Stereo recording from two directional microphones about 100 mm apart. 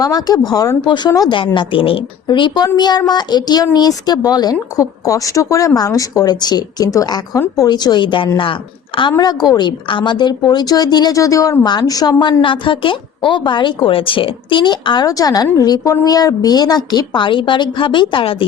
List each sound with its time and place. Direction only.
0.0 s speech: 40° left (ahead or behind)
1.5 s speech: 60° left (ahead or behind)
2.2 s a woman's voice: 50° left (ahead or behind)
9.1 s a woman's voice: 45° left (ahead or behind); by 18.4 s 60° left (ahead or behind)